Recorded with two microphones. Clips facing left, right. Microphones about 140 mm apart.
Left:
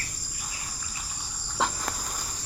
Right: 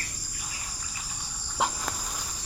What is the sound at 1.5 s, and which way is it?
Cricket, 10° right (ahead or behind).